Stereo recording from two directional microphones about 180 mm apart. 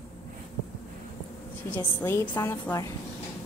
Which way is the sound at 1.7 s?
10° left (ahead or behind).